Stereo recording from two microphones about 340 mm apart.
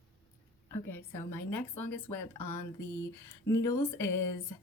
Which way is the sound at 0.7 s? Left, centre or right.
Centre.